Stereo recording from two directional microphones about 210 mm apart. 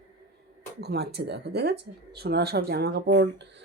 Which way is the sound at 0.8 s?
50° right (ahead or behind).